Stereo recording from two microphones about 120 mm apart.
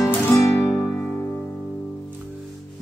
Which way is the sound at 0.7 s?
5° left (ahead or behind).